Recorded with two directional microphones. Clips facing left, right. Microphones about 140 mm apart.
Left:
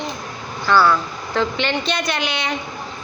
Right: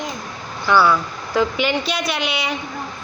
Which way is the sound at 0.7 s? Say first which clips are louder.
Even; 10° right (ahead or behind).